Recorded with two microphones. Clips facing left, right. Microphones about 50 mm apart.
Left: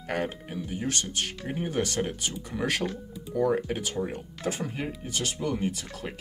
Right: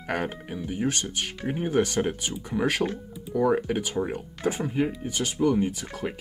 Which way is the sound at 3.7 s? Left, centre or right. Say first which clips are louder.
Right 3 dB; centre.